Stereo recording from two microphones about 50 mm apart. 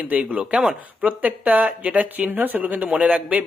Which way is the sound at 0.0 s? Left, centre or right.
Right.